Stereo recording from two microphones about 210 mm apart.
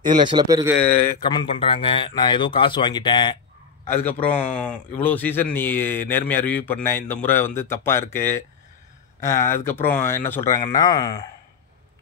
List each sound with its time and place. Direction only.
0.0 s speech: 40° right (ahead or behind)
0.3 s speech: 20° right (ahead or behind)
1.2 s speech: 20° left (ahead or behind)
3.8 s speech: 10° left (ahead or behind)